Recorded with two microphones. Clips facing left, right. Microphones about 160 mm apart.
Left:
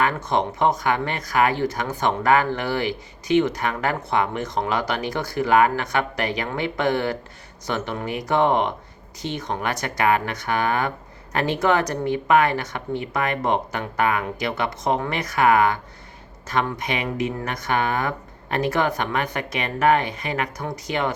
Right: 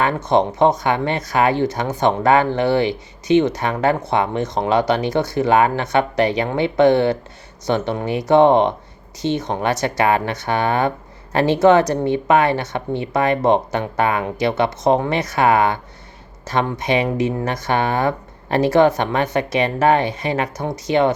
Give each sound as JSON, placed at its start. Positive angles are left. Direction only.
{"t": 0.9, "sound": "speech", "side_deg": -25}